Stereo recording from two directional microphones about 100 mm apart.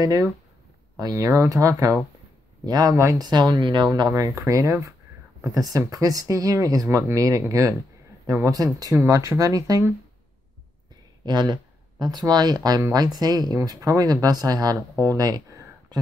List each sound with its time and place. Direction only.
0.0 s speech: 40° right (ahead or behind)
4.1 s speech: 35° right (ahead or behind)
11.2 s speech: 45° right (ahead or behind)